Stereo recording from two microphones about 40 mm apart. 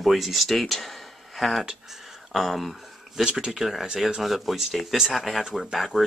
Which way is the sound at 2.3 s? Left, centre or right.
Centre.